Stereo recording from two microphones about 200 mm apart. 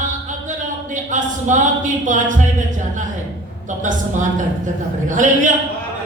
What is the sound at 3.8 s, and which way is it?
A woman's voice, 40° right (ahead or behind).